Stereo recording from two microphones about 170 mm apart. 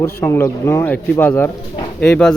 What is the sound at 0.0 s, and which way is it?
Speech, 15° left (ahead or behind).